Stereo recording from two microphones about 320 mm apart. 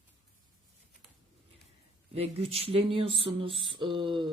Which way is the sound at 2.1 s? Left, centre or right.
Centre.